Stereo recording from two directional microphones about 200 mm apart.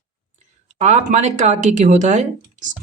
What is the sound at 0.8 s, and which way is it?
Speech, 35° right (ahead or behind).